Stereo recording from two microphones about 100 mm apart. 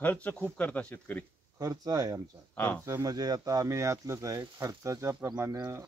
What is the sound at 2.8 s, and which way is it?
Speech, 30° right (ahead or behind).